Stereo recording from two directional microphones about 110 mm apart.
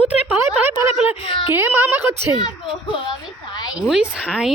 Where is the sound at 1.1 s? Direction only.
50° left (ahead or behind).